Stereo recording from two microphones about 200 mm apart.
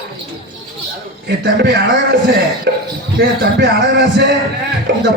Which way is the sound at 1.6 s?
55° right (ahead or behind).